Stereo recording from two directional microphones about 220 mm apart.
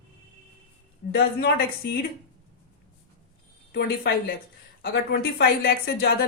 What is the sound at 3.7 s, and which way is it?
A woman's voice, 45° left (ahead or behind).